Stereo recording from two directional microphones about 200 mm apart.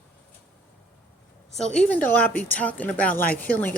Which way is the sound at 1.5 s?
5° left (ahead or behind).